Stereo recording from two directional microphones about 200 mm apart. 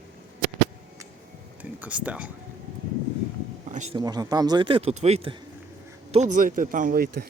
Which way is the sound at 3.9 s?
20° right (ahead or behind).